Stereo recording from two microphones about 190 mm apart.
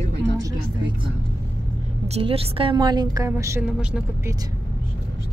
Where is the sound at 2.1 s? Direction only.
30° right (ahead or behind); by 4.3 s 5° right (ahead or behind).